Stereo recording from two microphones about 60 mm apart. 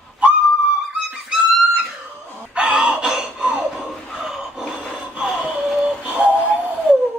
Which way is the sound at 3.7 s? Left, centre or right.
Centre.